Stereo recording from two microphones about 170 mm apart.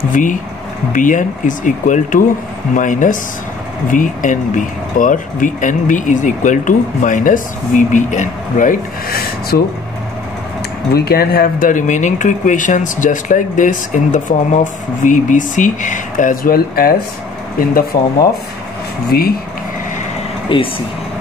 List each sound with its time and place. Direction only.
0.1 s speech: 50° left (ahead or behind)
10.9 s speech: 65° left (ahead or behind)
19.1 s speech: 65° left (ahead or behind)
20.5 s speech: 30° left (ahead or behind)